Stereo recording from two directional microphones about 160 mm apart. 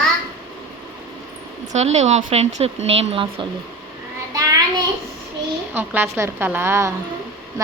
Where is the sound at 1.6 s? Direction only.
45° right (ahead or behind).